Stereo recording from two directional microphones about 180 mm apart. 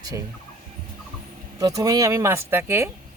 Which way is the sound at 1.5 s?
20° right (ahead or behind).